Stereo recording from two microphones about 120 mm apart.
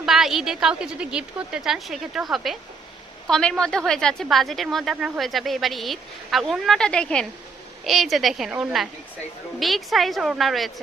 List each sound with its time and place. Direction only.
0.0 s a woman's voice: centre (ahead or behind)